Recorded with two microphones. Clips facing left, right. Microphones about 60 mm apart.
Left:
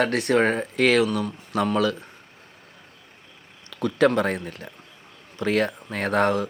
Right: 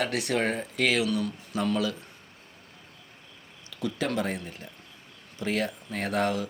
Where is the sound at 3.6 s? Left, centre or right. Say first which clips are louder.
Left 10 dB; left.